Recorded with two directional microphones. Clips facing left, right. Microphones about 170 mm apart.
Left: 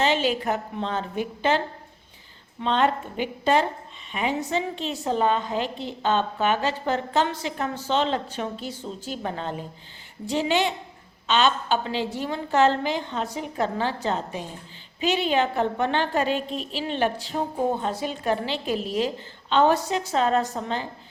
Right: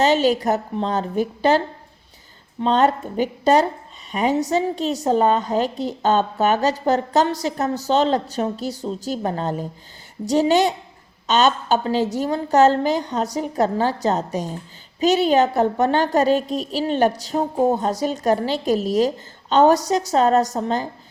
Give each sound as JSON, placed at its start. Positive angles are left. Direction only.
{"t": 0.0, "sound": "a woman's voice", "side_deg": -40}